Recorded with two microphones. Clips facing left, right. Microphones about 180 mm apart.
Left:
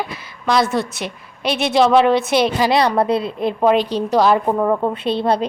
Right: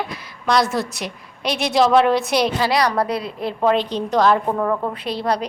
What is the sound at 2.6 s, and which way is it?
A woman's voice, 25° left (ahead or behind).